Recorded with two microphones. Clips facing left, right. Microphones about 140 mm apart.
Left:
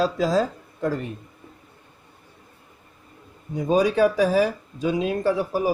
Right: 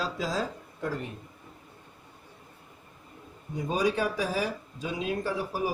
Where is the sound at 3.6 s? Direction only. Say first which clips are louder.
Left 9 dB; 90° left.